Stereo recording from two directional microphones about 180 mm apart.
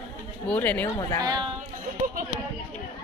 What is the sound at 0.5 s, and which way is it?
Speech, 10° left (ahead or behind).